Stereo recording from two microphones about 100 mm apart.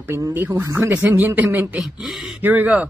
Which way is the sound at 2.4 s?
15° right (ahead or behind).